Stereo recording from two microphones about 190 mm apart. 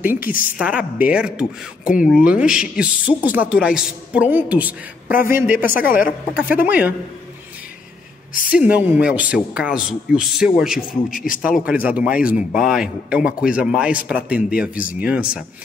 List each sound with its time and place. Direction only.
0.0 s speech: 10° right (ahead or behind)
5.8 s a woman's voice: 45° left (ahead or behind)
6.3 s speech: 10° right (ahead or behind)
8.5 s speech: 5° right (ahead or behind)